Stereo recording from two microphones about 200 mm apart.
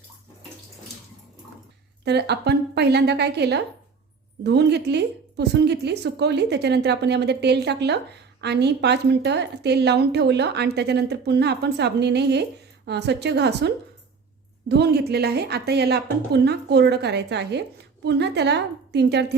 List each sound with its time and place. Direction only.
2.0 s a woman's voice: 55° right (ahead or behind)
14.7 s a woman's voice: 55° right (ahead or behind)